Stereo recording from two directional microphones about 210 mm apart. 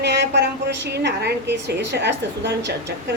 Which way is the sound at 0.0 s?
55° right (ahead or behind).